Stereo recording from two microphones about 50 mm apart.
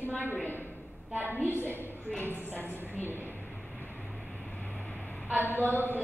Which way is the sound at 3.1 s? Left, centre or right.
Left.